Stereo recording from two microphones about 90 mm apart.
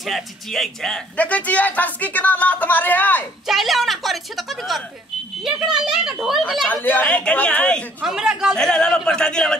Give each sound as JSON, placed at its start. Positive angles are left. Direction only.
{"t": 0.0, "sound": "a woman's voice", "side_deg": 0}
{"t": 1.1, "sound": "speech", "side_deg": 15}
{"t": 3.4, "sound": "a woman's voice", "side_deg": 0}
{"t": 6.7, "sound": "speech", "side_deg": 20}
{"t": 8.0, "sound": "speech", "side_deg": -5}
{"t": 8.5, "sound": "speech", "side_deg": 10}